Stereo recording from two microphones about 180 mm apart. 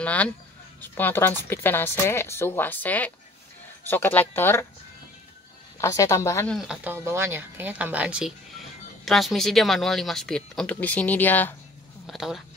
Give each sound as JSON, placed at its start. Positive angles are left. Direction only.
{"t": 0.0, "sound": "speech", "side_deg": 5}
{"t": 5.8, "sound": "speech", "side_deg": 15}
{"t": 6.5, "sound": "speech", "side_deg": -5}
{"t": 12.1, "sound": "speech", "side_deg": 0}